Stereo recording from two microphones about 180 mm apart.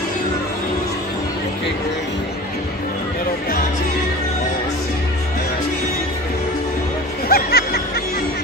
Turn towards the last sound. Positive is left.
turn(degrees=60)  # may be behind; listen again after turning